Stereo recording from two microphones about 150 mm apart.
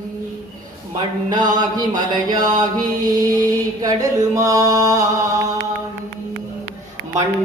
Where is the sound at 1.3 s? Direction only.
30° right (ahead or behind).